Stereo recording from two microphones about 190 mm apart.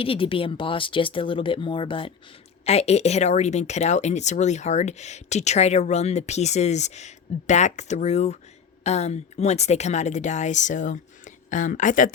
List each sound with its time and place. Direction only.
0.0 s speech: 30° left (ahead or behind)